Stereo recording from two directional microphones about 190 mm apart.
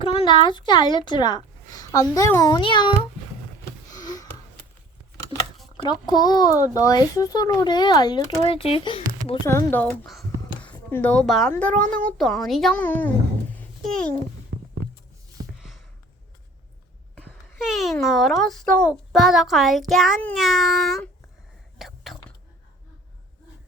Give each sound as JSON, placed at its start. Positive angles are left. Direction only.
{"t": 0.0, "sound": "a woman's voice", "side_deg": 30}
{"t": 3.9, "sound": "sniff", "side_deg": 20}
{"t": 5.7, "sound": "a child's voice", "side_deg": 20}
{"t": 9.5, "sound": "a child's voice", "side_deg": 15}
{"t": 13.6, "sound": "babbling", "side_deg": 5}
{"t": 15.5, "sound": "a sound", "side_deg": 0}
{"t": 17.2, "sound": "a sound", "side_deg": 5}
{"t": 17.6, "sound": "a child's voice", "side_deg": 0}
{"t": 21.8, "sound": "whispering", "side_deg": 0}